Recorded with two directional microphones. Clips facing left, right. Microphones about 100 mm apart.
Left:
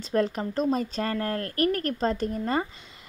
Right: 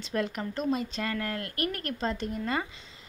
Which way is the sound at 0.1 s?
35° left (ahead or behind).